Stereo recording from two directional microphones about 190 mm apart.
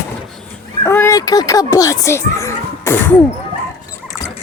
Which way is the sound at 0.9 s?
15° left (ahead or behind).